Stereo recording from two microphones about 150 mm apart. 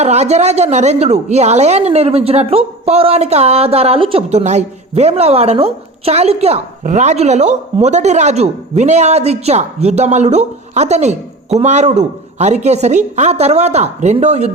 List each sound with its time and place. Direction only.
0.0 s a woman's voice: 50° right (ahead or behind)